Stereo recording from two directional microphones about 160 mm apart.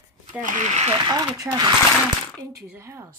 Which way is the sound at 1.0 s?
25° right (ahead or behind).